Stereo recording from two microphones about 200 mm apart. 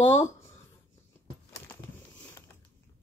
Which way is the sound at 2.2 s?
10° left (ahead or behind).